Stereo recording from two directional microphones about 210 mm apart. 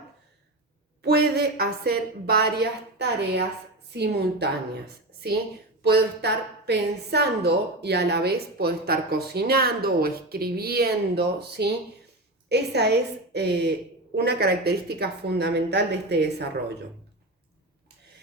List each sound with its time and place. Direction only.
1.0 s a woman's voice: 50° right (ahead or behind)
5.8 s a woman's voice: 50° right (ahead or behind)